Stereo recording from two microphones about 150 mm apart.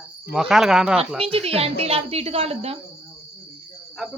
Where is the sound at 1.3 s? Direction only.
40° right (ahead or behind).